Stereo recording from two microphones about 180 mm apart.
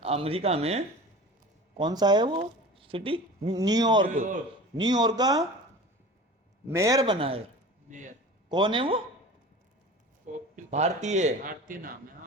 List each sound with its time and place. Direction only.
0.0 s speech: 35° right (ahead or behind)
1.8 s speech: 25° right (ahead or behind)
4.0 s speech: 45° right (ahead or behind)
4.8 s speech: 25° right (ahead or behind)
6.7 s speech: 15° right (ahead or behind)
8.4 s speech: 25° right (ahead or behind)
10.5 s speech: 40° right (ahead or behind)